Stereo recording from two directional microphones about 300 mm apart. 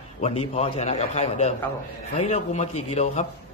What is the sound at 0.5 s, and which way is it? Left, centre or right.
A man's voice, centre.